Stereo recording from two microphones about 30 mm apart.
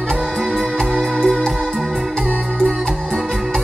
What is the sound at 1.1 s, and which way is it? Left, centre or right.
Music, centre.